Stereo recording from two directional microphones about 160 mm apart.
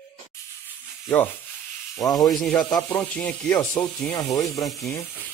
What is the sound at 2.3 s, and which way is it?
Speech, centre (ahead or behind).